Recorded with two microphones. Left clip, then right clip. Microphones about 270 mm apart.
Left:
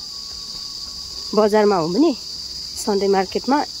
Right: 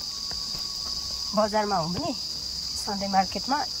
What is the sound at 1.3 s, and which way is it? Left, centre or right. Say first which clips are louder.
Cricket: left 9 dB; left.